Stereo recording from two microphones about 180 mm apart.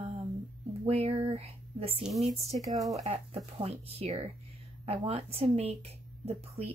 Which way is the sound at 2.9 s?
35° right (ahead or behind).